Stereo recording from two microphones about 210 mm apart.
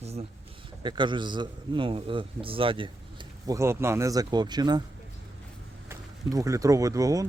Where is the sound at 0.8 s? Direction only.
20° right (ahead or behind).